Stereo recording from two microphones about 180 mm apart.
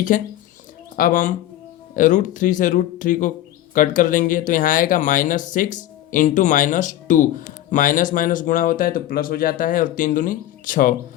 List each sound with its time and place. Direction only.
0.1 s speech: 45° left (ahead or behind)